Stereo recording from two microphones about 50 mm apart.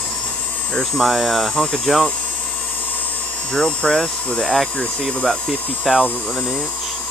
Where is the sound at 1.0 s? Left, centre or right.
Centre.